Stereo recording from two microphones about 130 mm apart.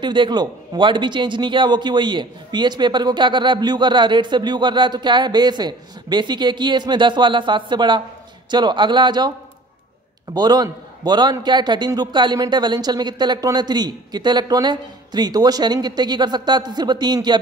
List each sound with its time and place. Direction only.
0.0 s a man's voice: 35° right (ahead or behind)
10.3 s a man's voice: 30° right (ahead or behind)